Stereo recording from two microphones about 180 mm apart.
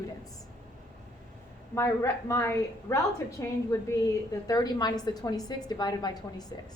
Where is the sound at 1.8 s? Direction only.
15° left (ahead or behind).